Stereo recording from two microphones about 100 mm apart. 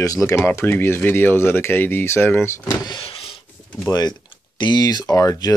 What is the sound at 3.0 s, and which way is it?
Power windows, 65° left (ahead or behind).